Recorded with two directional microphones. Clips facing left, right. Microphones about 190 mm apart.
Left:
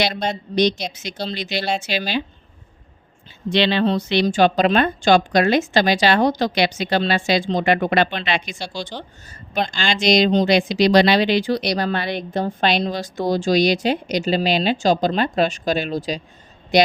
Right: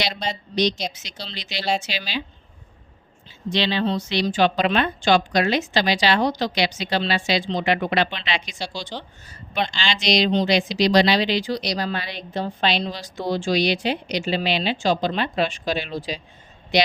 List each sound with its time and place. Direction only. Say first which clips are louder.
0.0 s speech: left 5 dB; 50° left (ahead or behind)
3.5 s a woman's voice: left 4 dB; 65° left (ahead or behind); by 16.9 s 50° left (ahead or behind)